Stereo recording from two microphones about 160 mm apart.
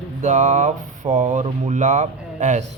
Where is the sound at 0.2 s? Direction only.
50° right (ahead or behind).